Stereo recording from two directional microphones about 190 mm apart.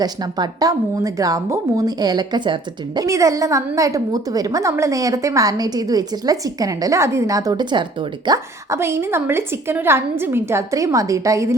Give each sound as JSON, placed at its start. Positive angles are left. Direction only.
{"t": 0.0, "sound": "speech", "side_deg": -20}